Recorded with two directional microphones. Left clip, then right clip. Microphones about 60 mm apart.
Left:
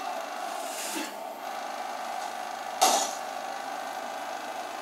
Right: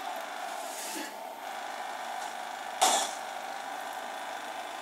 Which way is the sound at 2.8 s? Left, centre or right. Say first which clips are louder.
Left 3 dB; left.